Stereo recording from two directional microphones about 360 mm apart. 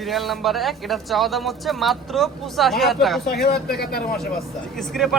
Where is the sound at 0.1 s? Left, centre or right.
Centre.